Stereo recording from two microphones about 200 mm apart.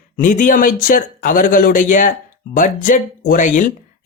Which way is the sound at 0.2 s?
40° left (ahead or behind).